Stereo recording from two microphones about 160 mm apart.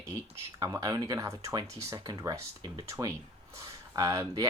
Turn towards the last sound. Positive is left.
turn(degrees=-20)  # may be behind; listen again after turning